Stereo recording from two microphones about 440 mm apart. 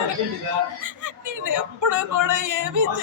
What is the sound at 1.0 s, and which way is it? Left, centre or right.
Speech, right.